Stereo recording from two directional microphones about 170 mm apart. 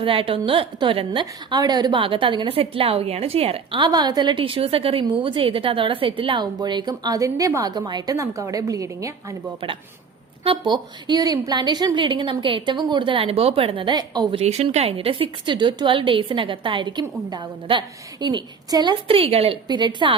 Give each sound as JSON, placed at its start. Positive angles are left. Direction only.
{"t": 0.0, "sound": "a woman's voice", "side_deg": -30}
{"t": 10.4, "sound": "a woman's voice", "side_deg": -30}